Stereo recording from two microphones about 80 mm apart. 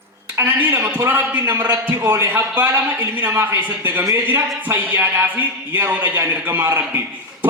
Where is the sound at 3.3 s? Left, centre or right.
Right.